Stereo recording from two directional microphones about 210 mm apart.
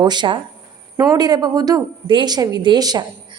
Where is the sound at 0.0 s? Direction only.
20° right (ahead or behind).